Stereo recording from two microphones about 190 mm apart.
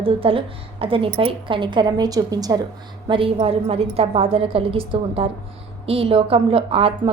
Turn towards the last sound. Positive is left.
turn(degrees=-30)  # may be behind; listen again after turning